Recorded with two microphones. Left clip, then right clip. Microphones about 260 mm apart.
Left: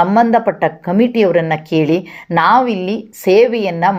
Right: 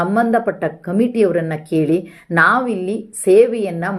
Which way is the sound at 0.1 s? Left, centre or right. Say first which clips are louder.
Left 4 dB; centre.